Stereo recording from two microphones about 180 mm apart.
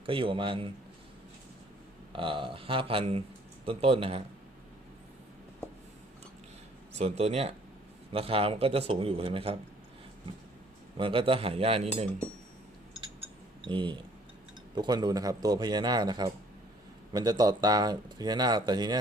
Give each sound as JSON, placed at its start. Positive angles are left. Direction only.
{"t": 0.0, "sound": "speech", "side_deg": -30}
{"t": 2.1, "sound": "speech", "side_deg": -30}
{"t": 7.0, "sound": "speech", "side_deg": -35}
{"t": 10.9, "sound": "speech", "side_deg": -30}
{"t": 13.7, "sound": "speech", "side_deg": -25}